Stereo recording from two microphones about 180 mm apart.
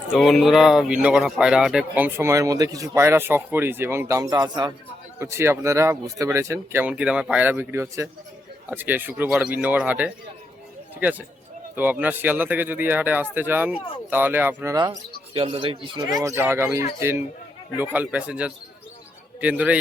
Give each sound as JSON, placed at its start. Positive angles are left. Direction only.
{"t": 0.1, "sound": "speech", "side_deg": 0}
{"t": 11.8, "sound": "speech", "side_deg": -10}
{"t": 15.3, "sound": "a man's voice", "side_deg": -30}
{"t": 16.1, "sound": "speech", "side_deg": -15}